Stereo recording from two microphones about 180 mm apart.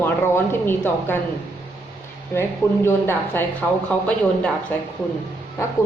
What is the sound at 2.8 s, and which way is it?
Speech, 10° left (ahead or behind).